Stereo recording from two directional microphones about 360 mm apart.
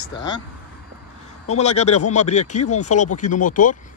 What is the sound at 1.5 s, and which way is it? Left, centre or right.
Speech, centre.